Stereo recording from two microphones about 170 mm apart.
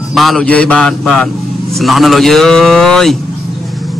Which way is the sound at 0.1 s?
Centre (ahead or behind).